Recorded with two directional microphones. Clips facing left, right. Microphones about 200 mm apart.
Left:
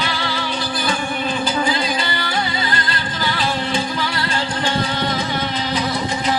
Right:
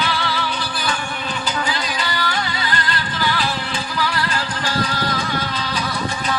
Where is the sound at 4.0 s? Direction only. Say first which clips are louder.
Even; 25° left (ahead or behind).